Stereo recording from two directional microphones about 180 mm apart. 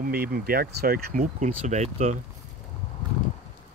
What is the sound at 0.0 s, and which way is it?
Speech, 55° right (ahead or behind).